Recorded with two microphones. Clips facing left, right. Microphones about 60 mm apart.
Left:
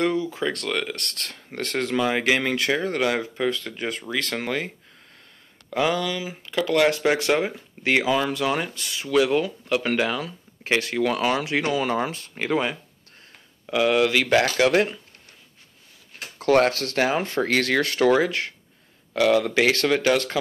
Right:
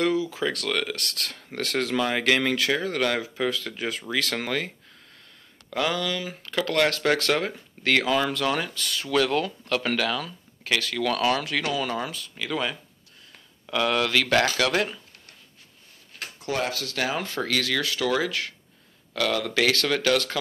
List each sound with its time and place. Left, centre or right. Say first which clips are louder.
0.0 s speech: left 1 dB; centre; by 12.5 s left
13.7 s speech: left 4 dB; centre
16.3 s speech: left 10 dB; left
16.9 s speech: left 5 dB; left